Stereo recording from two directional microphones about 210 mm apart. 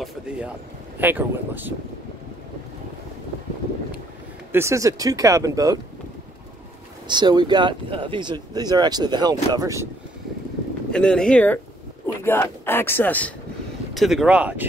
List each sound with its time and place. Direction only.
1.0 s speech: 10° right (ahead or behind)
4.5 s speech: 10° right (ahead or behind)
7.1 s speech: 20° right (ahead or behind)
10.9 s speech: 5° left (ahead or behind)